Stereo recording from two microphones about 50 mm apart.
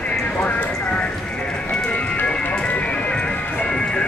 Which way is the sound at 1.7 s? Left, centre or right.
Left.